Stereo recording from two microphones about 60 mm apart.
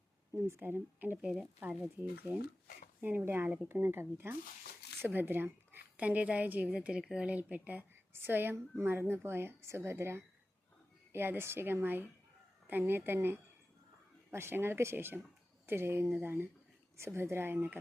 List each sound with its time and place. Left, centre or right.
0.3 s speech: right
0.6 s speech: right
1.1 s a woman's voice: centre
1.6 s speech: right
2.0 s speech: centre
3.2 s a woman's voice: right
6.7 s a woman's voice: centre
8.1 s speech: right